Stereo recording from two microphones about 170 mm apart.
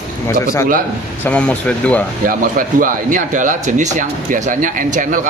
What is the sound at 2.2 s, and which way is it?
Speech, 55° right (ahead or behind).